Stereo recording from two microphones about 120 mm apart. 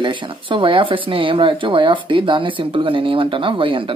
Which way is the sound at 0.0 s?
40° right (ahead or behind).